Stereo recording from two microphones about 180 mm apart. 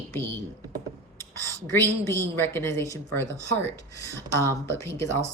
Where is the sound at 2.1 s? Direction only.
15° left (ahead or behind).